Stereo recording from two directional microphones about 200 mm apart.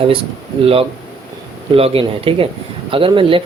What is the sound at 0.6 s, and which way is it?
Speech, 30° right (ahead or behind).